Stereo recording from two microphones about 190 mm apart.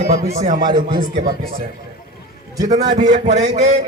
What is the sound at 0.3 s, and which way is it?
Speech, 40° right (ahead or behind).